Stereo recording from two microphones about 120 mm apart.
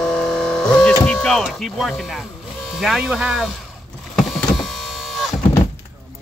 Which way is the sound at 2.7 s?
Centre (ahead or behind).